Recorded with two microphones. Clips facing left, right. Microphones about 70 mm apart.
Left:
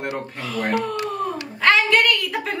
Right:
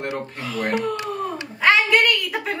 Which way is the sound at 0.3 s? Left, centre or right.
Centre.